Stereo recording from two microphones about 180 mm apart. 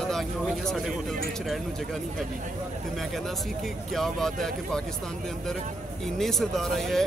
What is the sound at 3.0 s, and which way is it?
Speech, centre (ahead or behind).